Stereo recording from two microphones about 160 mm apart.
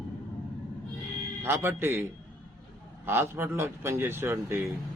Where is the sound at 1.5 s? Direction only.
15° right (ahead or behind).